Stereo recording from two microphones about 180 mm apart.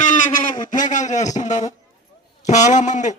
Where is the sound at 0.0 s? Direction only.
45° left (ahead or behind).